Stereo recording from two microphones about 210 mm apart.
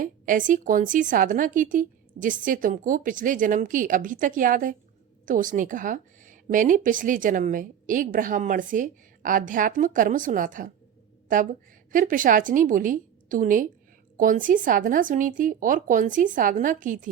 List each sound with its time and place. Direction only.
0.0 s a woman's voice: 40° right (ahead or behind)
11.9 s a woman's voice: 40° right (ahead or behind)